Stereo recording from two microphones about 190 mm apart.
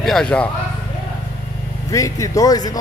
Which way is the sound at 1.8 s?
15° left (ahead or behind).